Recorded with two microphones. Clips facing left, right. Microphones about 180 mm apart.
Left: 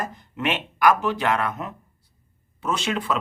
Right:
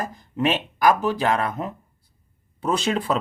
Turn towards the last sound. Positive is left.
turn(degrees=-35)  # may be behind; listen again after turning